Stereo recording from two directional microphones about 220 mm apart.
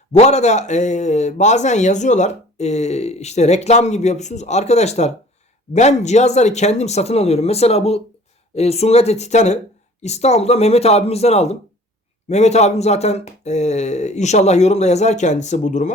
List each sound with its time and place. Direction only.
0.1 s a man's voice: 30° left (ahead or behind)